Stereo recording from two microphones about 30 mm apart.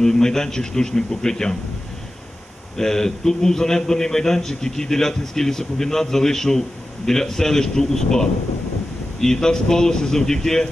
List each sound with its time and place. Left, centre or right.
0.0 s speech: centre
2.8 s a man's voice: centre